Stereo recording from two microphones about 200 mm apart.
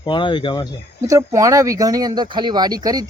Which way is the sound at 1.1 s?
15° right (ahead or behind).